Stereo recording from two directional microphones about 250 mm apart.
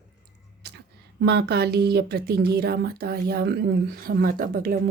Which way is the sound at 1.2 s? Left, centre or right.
Right.